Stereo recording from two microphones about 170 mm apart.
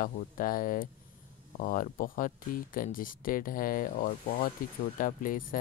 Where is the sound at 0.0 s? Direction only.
55° left (ahead or behind).